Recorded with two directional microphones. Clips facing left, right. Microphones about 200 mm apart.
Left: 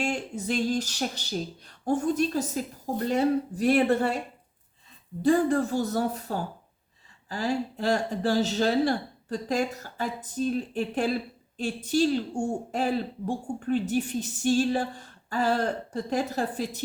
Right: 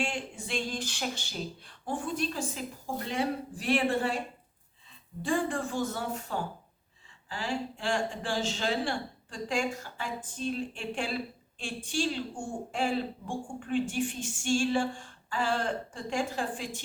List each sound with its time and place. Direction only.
0.0 s speech: 40° left (ahead or behind)
5.2 s speech: 40° left (ahead or behind)